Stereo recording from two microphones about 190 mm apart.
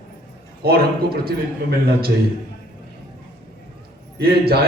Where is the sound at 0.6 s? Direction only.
55° right (ahead or behind).